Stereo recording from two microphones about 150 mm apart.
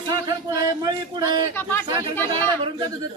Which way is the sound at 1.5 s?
15° left (ahead or behind).